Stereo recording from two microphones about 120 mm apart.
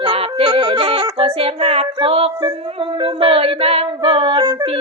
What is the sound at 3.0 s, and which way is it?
Music, 45° right (ahead or behind).